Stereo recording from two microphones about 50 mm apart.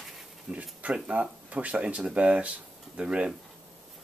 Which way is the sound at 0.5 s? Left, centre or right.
Right.